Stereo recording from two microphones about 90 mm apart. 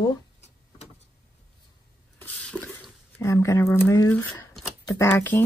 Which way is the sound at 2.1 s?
15° left (ahead or behind).